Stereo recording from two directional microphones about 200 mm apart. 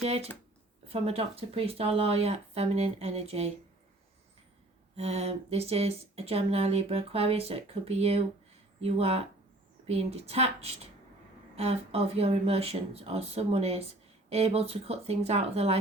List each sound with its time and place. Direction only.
0.0 s speech: 30° right (ahead or behind)
4.9 s speech: 30° right (ahead or behind)